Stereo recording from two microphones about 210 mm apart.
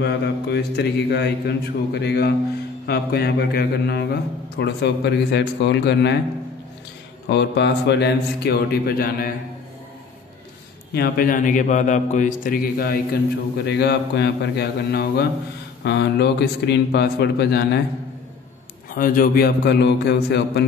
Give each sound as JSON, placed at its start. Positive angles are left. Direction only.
{"t": 0.0, "sound": "a man's voice", "side_deg": 50}
{"t": 7.2, "sound": "a man's voice", "side_deg": 55}
{"t": 10.9, "sound": "a man's voice", "side_deg": 45}
{"t": 18.9, "sound": "a man's voice", "side_deg": 40}